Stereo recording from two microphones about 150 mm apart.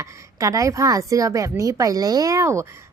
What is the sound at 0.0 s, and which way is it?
A woman's voice, 20° right (ahead or behind).